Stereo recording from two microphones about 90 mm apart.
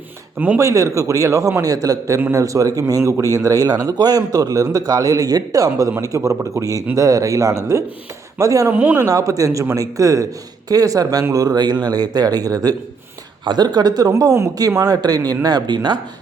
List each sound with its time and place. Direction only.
0.3 s speech: 20° right (ahead or behind)
0.6 s speech: 35° right (ahead or behind)
8.7 s speech: 20° right (ahead or behind)
9.0 s speech: 40° right (ahead or behind)
14.1 s speech: 35° right (ahead or behind); by 16.0 s 55° right (ahead or behind)